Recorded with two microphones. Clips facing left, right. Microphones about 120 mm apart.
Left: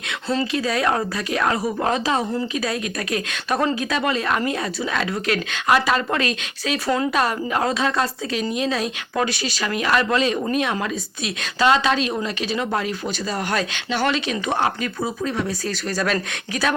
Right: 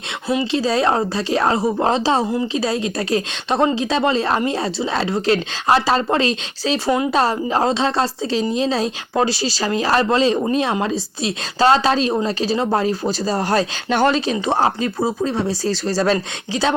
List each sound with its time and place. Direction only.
0.5 s a woman's voice: 30° right (ahead or behind)